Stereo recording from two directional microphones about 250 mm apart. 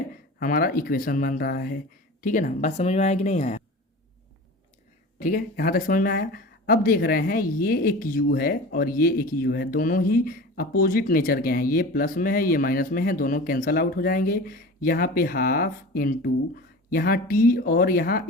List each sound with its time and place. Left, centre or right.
0.3 s speech: left
5.2 s speech: left